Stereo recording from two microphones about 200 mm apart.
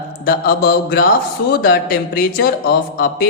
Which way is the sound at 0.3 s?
50° left (ahead or behind).